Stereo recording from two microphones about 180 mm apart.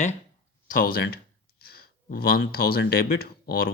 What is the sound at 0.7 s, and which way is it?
Speech, 50° left (ahead or behind).